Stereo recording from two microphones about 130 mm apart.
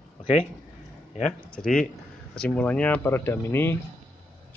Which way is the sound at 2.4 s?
10° left (ahead or behind).